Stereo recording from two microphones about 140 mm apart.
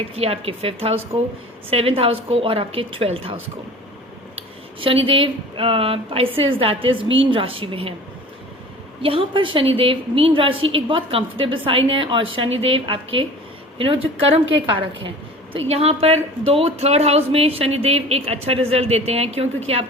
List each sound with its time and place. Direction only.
0.1 s speech: 45° right (ahead or behind)
4.8 s a woman's voice: 40° right (ahead or behind)
9.0 s a woman's voice: 40° right (ahead or behind)